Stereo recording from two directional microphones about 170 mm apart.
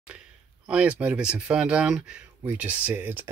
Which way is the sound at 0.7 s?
5° right (ahead or behind).